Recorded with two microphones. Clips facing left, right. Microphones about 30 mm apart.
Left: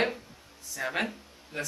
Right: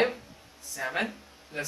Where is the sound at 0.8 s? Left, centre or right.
Centre.